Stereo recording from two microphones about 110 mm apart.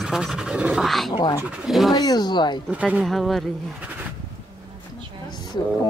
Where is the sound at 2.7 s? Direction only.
10° right (ahead or behind).